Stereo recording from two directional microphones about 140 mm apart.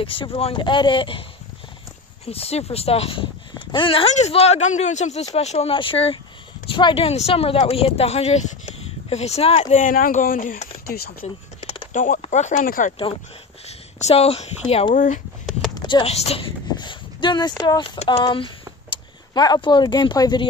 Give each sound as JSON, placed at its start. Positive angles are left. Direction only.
{"t": 0.0, "sound": "speech", "side_deg": 40}
{"t": 2.2, "sound": "speech", "side_deg": 45}
{"t": 11.2, "sound": "a sound", "side_deg": 45}
{"t": 11.9, "sound": "speech", "side_deg": 70}
{"t": 13.7, "sound": "speech", "side_deg": 50}
{"t": 15.8, "sound": "speech", "side_deg": 35}
{"t": 16.7, "sound": "a sound", "side_deg": 35}
{"t": 18.0, "sound": "speech", "side_deg": 35}